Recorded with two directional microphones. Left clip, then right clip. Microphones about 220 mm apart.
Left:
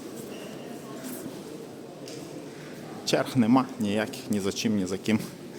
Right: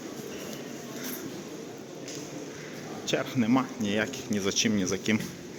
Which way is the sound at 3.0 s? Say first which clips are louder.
Left 4 dB; 30° left (ahead or behind).